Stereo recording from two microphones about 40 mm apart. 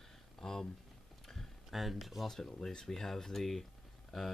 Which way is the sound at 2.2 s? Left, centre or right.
Centre.